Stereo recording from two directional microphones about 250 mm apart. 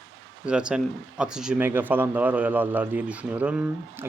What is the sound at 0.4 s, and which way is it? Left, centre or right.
Speech, centre.